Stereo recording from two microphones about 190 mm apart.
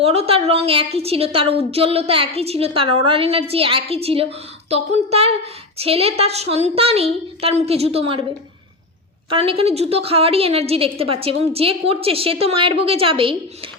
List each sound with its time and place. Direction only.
0.0 s a woman's voice: 30° right (ahead or behind)
9.3 s a woman's voice: 30° right (ahead or behind)